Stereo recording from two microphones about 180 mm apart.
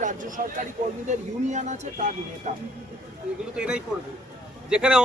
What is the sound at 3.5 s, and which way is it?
Speech, 5° right (ahead or behind).